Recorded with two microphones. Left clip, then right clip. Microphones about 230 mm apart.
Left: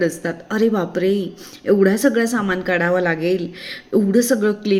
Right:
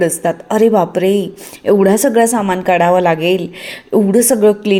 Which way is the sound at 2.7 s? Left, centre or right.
Right.